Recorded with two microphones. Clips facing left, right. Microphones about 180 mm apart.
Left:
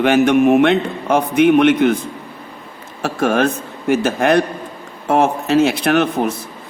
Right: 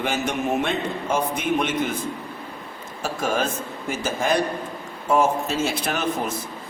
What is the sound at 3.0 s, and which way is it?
A man's voice, 65° left (ahead or behind).